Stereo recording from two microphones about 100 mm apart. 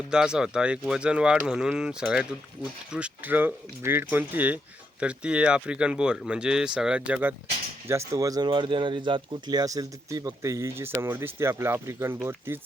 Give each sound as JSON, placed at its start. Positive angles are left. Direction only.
{"t": 0.1, "sound": "speech", "side_deg": -5}
{"t": 7.9, "sound": "speech", "side_deg": -30}
{"t": 8.4, "sound": "speech", "side_deg": -55}